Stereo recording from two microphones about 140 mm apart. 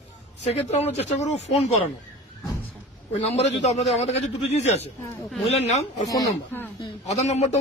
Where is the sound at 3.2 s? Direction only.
50° left (ahead or behind).